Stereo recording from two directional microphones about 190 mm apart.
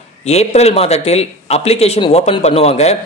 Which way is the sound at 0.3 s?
35° left (ahead or behind).